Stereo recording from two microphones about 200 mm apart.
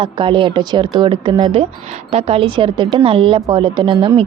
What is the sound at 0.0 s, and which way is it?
Speech, 25° right (ahead or behind).